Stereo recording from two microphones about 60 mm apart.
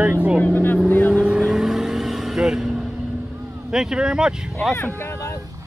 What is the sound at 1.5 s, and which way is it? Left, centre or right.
Vehicle, centre.